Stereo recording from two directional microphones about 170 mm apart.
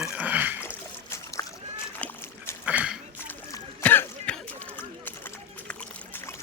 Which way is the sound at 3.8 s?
10° left (ahead or behind).